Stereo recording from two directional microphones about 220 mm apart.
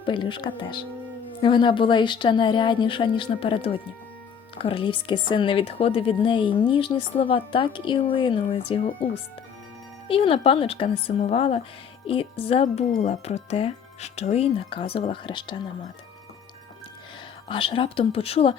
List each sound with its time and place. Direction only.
0.0 s speech: 20° left (ahead or behind)
17.5 s speech: 25° left (ahead or behind)